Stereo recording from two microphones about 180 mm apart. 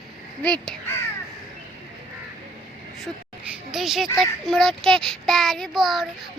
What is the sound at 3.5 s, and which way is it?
A woman's voice, centre (ahead or behind).